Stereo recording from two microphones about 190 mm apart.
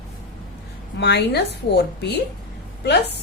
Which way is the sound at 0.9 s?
60° left (ahead or behind).